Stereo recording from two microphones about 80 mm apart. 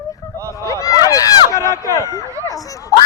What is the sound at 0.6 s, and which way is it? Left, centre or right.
Speech, left.